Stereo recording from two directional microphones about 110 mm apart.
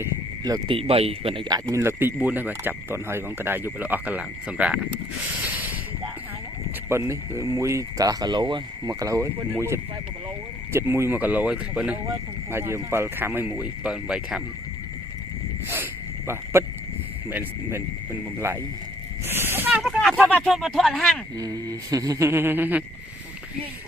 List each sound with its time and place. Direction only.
0.7 s speech: 60° right (ahead or behind)
1.5 s speech: 35° right (ahead or behind)
1.8 s speech: 20° right (ahead or behind)
6.8 s speech: 25° right (ahead or behind)
12.5 s speech: 20° right (ahead or behind); by 14.4 s 5° right (ahead or behind)
15.7 s a sound: 20° right (ahead or behind)
17.2 s speech: 20° right (ahead or behind)
20.3 s speech: 5° left (ahead or behind)
21.3 s speech: 35° right (ahead or behind)
22.3 s speech: 20° right (ahead or behind)